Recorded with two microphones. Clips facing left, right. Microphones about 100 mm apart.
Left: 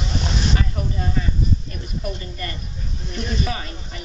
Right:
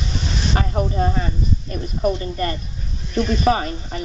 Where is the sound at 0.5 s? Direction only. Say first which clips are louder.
Right 6 dB; 45° right (ahead or behind).